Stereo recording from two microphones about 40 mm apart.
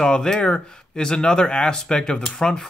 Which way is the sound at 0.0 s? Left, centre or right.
Centre.